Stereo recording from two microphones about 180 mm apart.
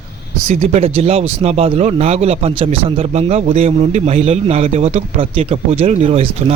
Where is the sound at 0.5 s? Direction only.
35° right (ahead or behind).